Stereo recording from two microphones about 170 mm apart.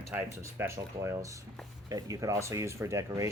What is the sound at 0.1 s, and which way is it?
Speech, 15° right (ahead or behind).